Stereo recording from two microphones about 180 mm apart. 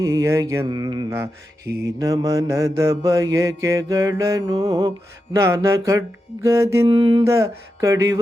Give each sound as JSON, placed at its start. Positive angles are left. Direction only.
{"t": 0.0, "sound": "mantra", "side_deg": -15}
{"t": 6.8, "sound": "a sound", "side_deg": -30}
{"t": 7.3, "sound": "mantra", "side_deg": -15}